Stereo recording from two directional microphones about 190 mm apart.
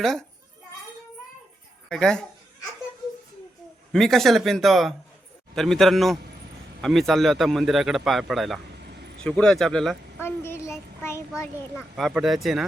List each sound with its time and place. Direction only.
0.0 s speech: centre (ahead or behind)
1.9 s speech: 5° left (ahead or behind)
3.9 s speech: centre (ahead or behind)
8.8 s a sound: 60° right (ahead or behind)
9.4 s speech: centre (ahead or behind)
10.2 s child singing: 10° left (ahead or behind)
11.8 s speech: centre (ahead or behind)